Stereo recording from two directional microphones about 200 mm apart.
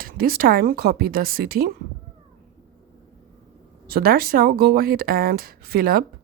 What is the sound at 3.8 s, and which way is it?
Speech, 50° right (ahead or behind).